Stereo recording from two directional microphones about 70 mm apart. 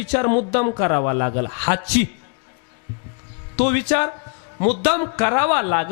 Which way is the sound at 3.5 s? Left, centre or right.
Centre.